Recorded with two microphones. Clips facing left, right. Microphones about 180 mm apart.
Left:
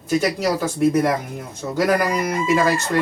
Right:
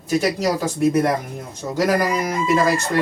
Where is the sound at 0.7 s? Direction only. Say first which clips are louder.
Left 1 dB; centre (ahead or behind).